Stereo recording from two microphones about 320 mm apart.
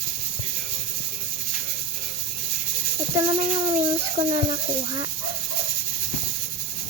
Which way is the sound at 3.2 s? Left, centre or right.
Centre.